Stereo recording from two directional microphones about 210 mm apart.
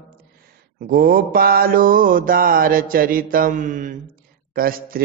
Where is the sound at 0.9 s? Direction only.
45° right (ahead or behind).